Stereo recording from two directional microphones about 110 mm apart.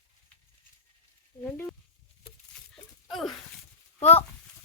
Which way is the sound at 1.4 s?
15° left (ahead or behind).